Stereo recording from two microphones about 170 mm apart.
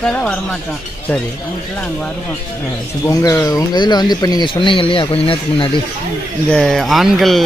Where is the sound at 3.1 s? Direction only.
20° left (ahead or behind).